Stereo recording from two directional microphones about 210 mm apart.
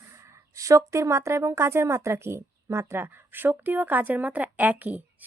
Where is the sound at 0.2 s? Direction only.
15° right (ahead or behind).